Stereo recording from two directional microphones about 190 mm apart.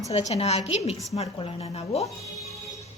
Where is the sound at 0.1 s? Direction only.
35° left (ahead or behind).